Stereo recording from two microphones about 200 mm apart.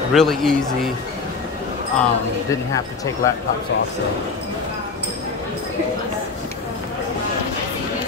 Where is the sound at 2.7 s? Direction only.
15° left (ahead or behind).